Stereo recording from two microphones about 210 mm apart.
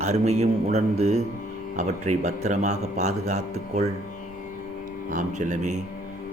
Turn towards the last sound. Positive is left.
turn(degrees=-35)  # may be behind; listen again after turning